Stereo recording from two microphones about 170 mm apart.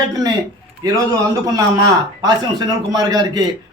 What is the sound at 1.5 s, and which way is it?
A man's voice, 20° right (ahead or behind).